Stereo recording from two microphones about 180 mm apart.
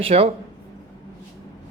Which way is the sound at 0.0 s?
35° right (ahead or behind).